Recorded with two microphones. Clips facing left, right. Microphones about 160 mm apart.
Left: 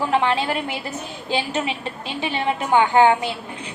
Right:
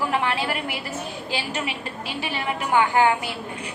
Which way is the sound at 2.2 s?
25° left (ahead or behind).